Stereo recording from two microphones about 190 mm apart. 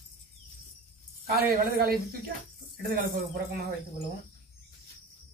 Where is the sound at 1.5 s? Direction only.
55° right (ahead or behind).